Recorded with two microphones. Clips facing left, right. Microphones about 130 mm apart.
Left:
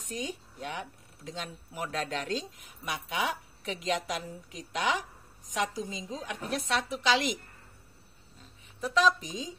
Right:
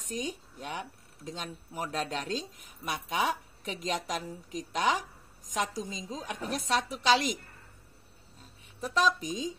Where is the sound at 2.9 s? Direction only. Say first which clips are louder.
Right 2 dB; 40° right (ahead or behind).